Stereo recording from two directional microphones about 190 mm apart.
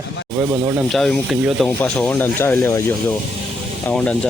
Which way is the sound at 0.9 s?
Centre (ahead or behind).